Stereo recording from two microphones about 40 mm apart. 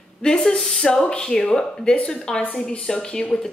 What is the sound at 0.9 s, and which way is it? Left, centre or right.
Speech, left.